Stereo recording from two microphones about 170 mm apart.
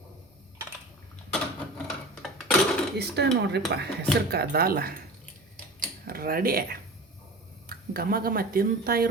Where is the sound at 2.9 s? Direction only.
80° right; by 4.9 s 65° right (ahead or behind).